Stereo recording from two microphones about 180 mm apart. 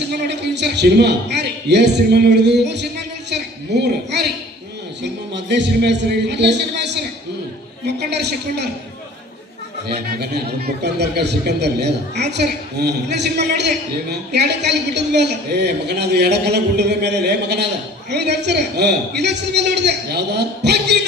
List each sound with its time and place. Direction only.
0.1 s a man's voice: 70° right (ahead or behind)
5.0 s a man's voice: 75° right (ahead or behind)
9.9 s a man's voice: 60° right (ahead or behind)